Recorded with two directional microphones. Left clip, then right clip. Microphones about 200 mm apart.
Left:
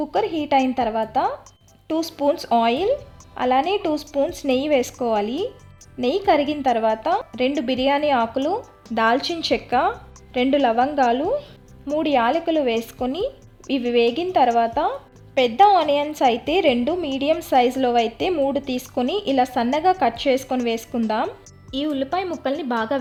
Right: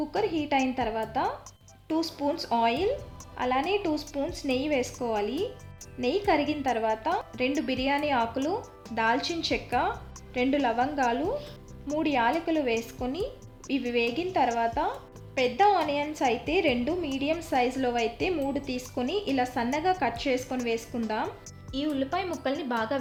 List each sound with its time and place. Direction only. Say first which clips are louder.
0.0 s a woman's voice: left 6 dB; 40° left (ahead or behind)